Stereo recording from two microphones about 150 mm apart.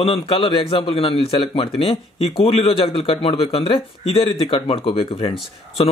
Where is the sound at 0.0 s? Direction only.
40° left (ahead or behind).